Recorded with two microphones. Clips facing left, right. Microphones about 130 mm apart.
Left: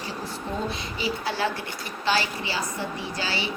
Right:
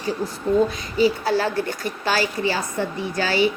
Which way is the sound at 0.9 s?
40° right (ahead or behind).